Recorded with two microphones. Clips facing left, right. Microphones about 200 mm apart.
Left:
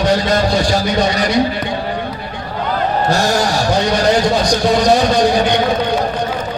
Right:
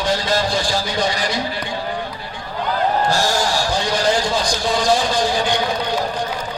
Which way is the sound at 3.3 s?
60° left (ahead or behind).